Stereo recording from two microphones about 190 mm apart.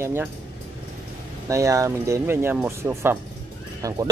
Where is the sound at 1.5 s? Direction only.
15° right (ahead or behind).